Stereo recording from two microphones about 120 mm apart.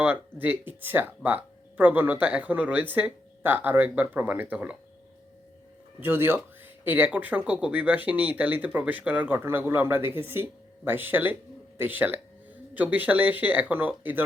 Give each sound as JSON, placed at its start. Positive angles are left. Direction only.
{"t": 0.0, "sound": "speech", "side_deg": -15}
{"t": 6.0, "sound": "speech", "side_deg": -20}